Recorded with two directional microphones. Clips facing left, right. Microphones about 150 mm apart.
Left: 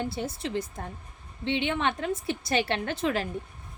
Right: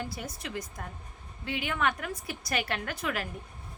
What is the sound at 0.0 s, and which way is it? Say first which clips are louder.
A woman's voice: left 6 dB; 30° left (ahead or behind).